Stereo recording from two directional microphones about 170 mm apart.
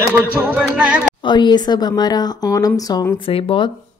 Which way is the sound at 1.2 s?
25° left (ahead or behind).